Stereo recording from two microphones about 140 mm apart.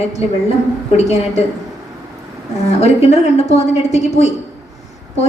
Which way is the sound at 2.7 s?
50° left (ahead or behind).